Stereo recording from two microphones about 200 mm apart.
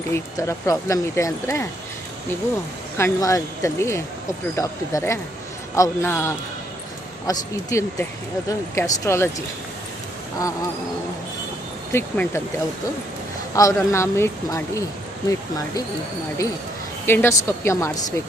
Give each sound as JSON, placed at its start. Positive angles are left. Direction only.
{"t": 0.1, "sound": "speech", "side_deg": 15}
{"t": 3.0, "sound": "speech", "side_deg": 15}
{"t": 11.9, "sound": "speech", "side_deg": 10}
{"t": 13.5, "sound": "speech", "side_deg": 15}
{"t": 17.1, "sound": "speech", "side_deg": 10}